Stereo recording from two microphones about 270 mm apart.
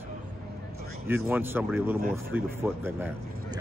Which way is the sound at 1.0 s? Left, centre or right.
Centre.